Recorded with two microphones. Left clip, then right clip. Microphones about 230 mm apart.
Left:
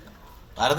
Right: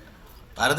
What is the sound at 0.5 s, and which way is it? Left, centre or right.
Speech, right.